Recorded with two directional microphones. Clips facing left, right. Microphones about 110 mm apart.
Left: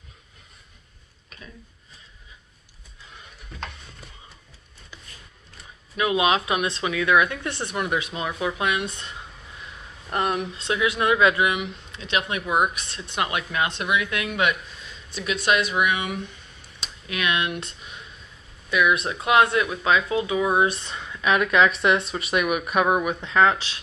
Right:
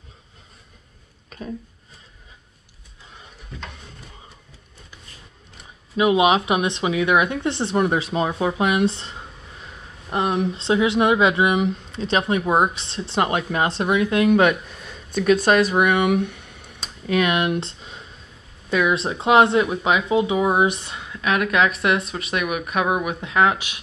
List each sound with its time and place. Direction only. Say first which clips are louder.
5.9 s speech: right 5 dB; 20° right (ahead or behind)
10.0 s speech: right 3 dB; 15° right (ahead or behind)
10.4 s speech: right 5 dB; 30° right (ahead or behind)
11.5 s speech: right 9 dB; 35° right (ahead or behind); by 16.8 s 65° right (ahead or behind)
16.8 s speech: right 7 dB; 30° right (ahead or behind); by 23.8 s 10° right (ahead or behind)